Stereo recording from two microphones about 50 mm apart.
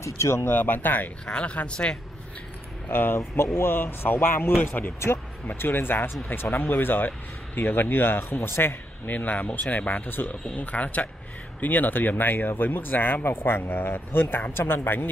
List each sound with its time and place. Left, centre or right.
0.0 s speech: left
0.5 s speech: left
1.2 s speech: left
2.9 s speech: left
9.0 s speech: left
10.0 s speech: left
10.5 s speech: left